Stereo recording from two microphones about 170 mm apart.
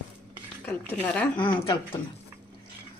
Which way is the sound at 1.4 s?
30° left (ahead or behind).